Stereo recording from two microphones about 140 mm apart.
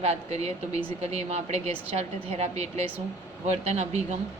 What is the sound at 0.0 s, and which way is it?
A woman's voice, 50° right (ahead or behind).